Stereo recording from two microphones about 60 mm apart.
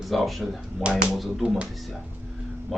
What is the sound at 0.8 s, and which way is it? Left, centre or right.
Speech, centre.